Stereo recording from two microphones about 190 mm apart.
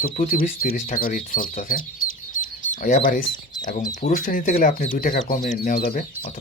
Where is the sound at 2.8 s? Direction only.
45° left (ahead or behind).